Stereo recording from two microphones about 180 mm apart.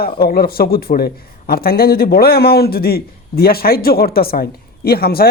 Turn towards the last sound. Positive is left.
turn(degrees=60)  # may be behind; listen again after turning